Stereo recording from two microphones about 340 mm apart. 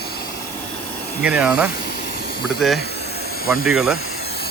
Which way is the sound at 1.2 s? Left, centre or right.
Centre.